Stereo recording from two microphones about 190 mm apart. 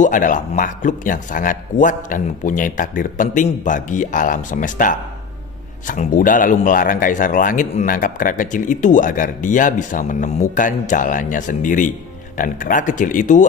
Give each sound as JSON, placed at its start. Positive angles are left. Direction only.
{"t": 0.0, "sound": "speech", "side_deg": 45}